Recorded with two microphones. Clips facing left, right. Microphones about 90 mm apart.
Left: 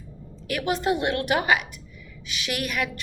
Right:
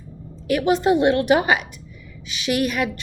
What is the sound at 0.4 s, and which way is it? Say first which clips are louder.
A woman's voice: right 7 dB; 25° right (ahead or behind).